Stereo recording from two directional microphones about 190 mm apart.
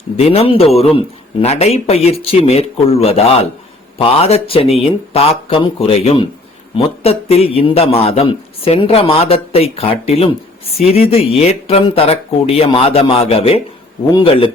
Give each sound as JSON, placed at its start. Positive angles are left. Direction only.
{"t": 0.2, "sound": "a man's voice", "side_deg": 30}